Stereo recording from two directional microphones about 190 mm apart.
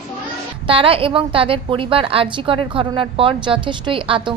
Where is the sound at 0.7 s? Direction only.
30° right (ahead or behind).